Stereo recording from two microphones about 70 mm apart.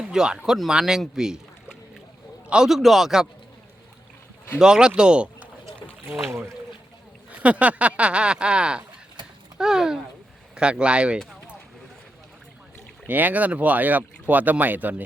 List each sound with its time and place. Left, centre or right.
0.0 s speech: centre
2.5 s a man's voice: centre
4.6 s speech: centre
7.3 s speech: centre
13.1 s speech: right